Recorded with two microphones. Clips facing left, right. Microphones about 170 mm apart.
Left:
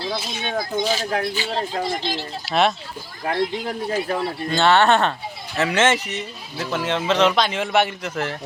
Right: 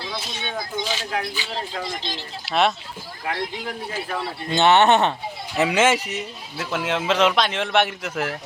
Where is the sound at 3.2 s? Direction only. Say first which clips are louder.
Left 5 dB; 40° left (ahead or behind).